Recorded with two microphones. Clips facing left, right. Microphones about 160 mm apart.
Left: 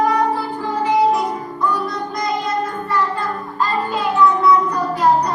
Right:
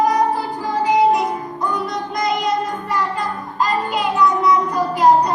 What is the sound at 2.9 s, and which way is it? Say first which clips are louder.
Music: left 2 dB; 15° right (ahead or behind).